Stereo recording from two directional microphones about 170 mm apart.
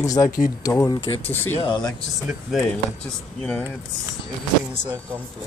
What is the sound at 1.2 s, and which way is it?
Speech, 10° left (ahead or behind).